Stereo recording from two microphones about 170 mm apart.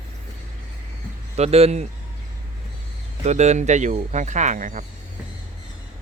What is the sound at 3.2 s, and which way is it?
Speech, 40° right (ahead or behind).